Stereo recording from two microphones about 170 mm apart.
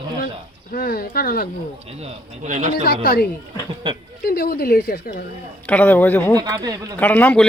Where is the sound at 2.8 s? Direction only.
65° left (ahead or behind).